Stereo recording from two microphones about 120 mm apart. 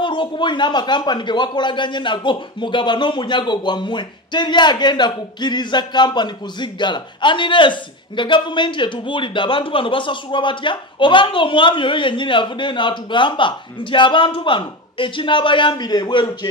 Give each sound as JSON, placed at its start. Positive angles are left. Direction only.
{"t": 0.0, "sound": "speech", "side_deg": 45}